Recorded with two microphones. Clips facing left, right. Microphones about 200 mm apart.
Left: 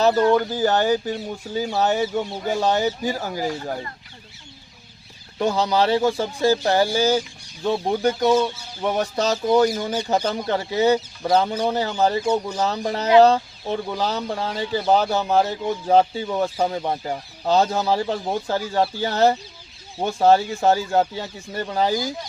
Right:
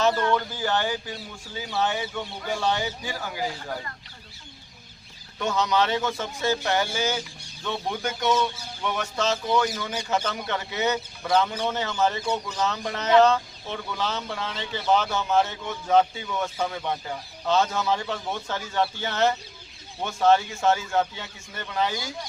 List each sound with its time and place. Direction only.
0.0 s speech: 35° left (ahead or behind)
5.4 s speech: 30° left (ahead or behind)